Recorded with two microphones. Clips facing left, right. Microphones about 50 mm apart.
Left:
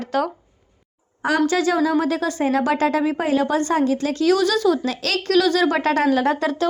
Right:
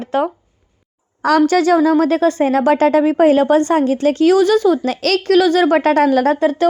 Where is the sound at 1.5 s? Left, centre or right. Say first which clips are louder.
Right 6 dB; right.